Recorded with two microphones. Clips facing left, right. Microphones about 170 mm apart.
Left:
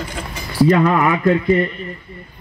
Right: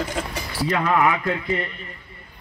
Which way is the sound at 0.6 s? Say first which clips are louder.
Left 5 dB; 45° left (ahead or behind).